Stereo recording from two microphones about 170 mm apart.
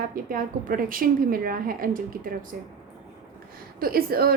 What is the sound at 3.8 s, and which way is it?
Speech, 60° right (ahead or behind).